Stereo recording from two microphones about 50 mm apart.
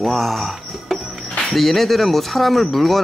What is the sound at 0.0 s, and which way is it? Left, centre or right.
Speech, centre.